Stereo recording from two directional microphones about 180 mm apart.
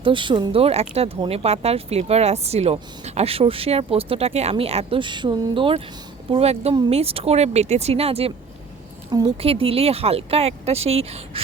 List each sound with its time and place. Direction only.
0.0 s speech: 25° right (ahead or behind)
9.0 s speech: 25° right (ahead or behind)